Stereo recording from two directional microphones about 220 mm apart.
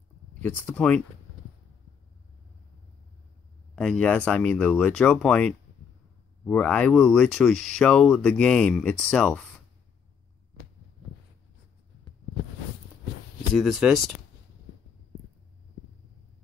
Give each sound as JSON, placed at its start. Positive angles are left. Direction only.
{"t": 0.4, "sound": "speech", "side_deg": 10}
{"t": 3.7, "sound": "speech", "side_deg": 5}
{"t": 13.6, "sound": "speech", "side_deg": 0}